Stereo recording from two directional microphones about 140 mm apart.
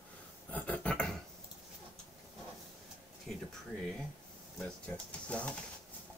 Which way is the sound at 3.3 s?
Centre (ahead or behind).